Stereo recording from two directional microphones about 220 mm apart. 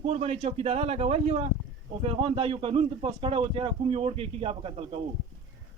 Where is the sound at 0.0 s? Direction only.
30° right (ahead or behind).